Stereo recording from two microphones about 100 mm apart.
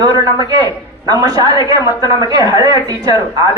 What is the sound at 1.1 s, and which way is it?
A man's voice, 35° right (ahead or behind).